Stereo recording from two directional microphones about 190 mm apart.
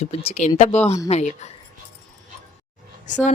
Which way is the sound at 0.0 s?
30° left (ahead or behind).